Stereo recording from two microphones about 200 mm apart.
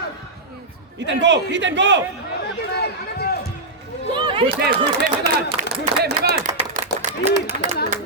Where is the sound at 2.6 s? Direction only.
55° left (ahead or behind).